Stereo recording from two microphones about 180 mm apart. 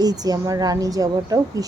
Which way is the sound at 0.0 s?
20° right (ahead or behind).